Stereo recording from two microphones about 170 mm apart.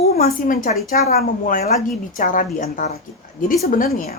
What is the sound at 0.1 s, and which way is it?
A woman's voice, 65° left (ahead or behind).